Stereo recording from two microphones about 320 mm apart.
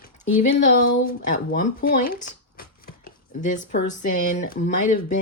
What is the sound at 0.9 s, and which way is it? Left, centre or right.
Speech, left.